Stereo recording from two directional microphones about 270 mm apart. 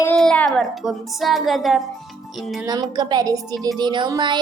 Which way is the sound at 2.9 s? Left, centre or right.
Centre.